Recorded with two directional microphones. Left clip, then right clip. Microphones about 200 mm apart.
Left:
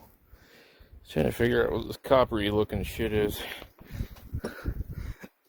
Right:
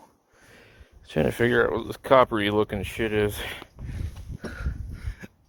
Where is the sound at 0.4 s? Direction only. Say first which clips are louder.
Right 4 dB; centre (ahead or behind).